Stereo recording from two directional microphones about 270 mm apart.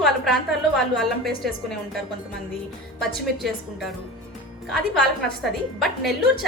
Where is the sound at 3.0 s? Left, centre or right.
Centre.